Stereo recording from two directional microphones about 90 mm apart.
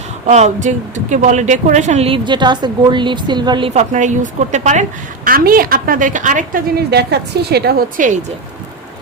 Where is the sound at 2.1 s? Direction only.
60° right (ahead or behind).